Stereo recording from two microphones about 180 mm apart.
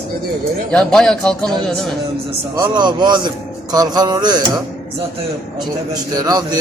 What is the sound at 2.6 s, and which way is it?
A man's voice, 25° right (ahead or behind).